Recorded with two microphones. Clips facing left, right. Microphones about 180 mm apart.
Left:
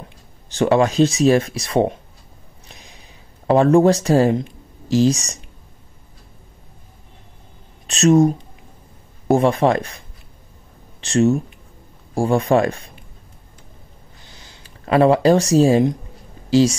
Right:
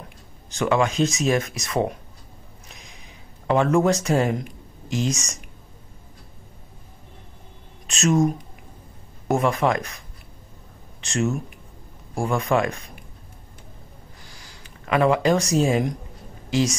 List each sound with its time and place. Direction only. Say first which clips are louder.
0.5 s speech: left 5 dB; 35° left (ahead or behind)
2.7 s a sound: left 4 dB; 35° left (ahead or behind)
3.4 s speech: left 6 dB; 35° left (ahead or behind)
7.8 s speech: left 6 dB; 35° left (ahead or behind)
14.2 s a sound: left 1 dB; 25° left (ahead or behind)
16.4 s a woman's voice: left 8 dB; 30° left (ahead or behind)